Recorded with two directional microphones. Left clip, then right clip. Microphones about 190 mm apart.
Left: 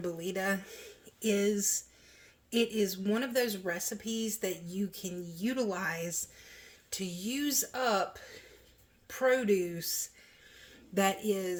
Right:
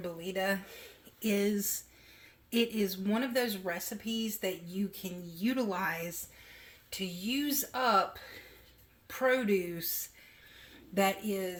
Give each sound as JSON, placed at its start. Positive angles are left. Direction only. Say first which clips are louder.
{"t": 0.0, "sound": "speech", "louder": "even", "side_deg": 40}
{"t": 1.2, "sound": "speech", "louder": "left 2 dB", "side_deg": 20}
{"t": 6.9, "sound": "speech", "louder": "right 2 dB", "side_deg": 35}
{"t": 10.9, "sound": "speech", "louder": "left 1 dB", "side_deg": 30}